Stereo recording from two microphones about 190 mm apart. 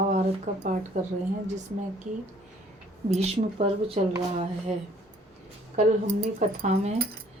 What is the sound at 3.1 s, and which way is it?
Speech, 35° right (ahead or behind).